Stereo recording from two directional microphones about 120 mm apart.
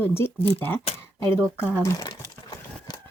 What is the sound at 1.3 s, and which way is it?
Speech, 20° left (ahead or behind).